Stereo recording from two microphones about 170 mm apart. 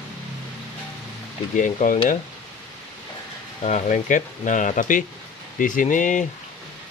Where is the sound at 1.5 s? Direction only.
50° left (ahead or behind).